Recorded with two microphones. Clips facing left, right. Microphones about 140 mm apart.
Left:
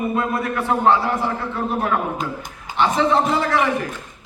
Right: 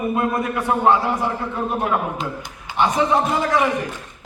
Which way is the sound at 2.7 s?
15° right (ahead or behind).